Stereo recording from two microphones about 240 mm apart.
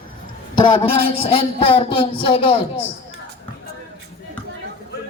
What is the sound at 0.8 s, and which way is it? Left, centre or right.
A man's voice, left.